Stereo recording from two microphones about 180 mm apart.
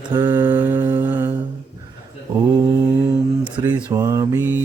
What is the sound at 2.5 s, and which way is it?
Mantra, 20° right (ahead or behind).